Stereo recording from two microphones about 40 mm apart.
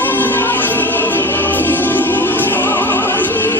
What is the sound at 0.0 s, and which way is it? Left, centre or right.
Music, left.